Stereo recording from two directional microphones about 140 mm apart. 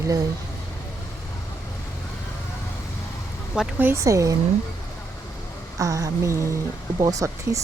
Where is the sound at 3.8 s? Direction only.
20° right (ahead or behind).